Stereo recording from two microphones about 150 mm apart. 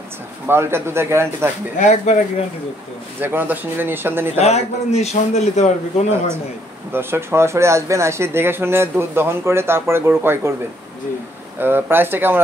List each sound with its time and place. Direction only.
0.5 s speech: 15° right (ahead or behind)
1.8 s speech: 50° left (ahead or behind)
3.2 s speech: 15° right (ahead or behind)
4.4 s speech: 45° left (ahead or behind)
6.9 s speech: 15° right (ahead or behind)
11.6 s speech: 15° right (ahead or behind)